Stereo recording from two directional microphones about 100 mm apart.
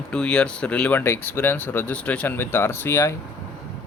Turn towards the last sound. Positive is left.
turn(degrees=25)  # may be behind; listen again after turning